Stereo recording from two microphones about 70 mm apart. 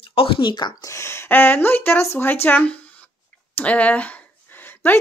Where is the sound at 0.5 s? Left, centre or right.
Left.